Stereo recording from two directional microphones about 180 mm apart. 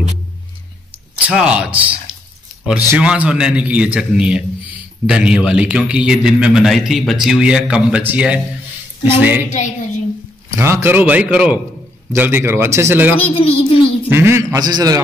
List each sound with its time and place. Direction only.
1.2 s a man's voice: 5° right (ahead or behind)
10.5 s a man's voice: 15° right (ahead or behind)
13.3 s a child's voice: 30° left (ahead or behind)
14.0 s a man's voice: 15° right (ahead or behind)